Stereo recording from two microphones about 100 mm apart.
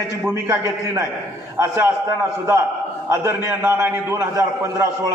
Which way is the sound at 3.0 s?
25° right (ahead or behind).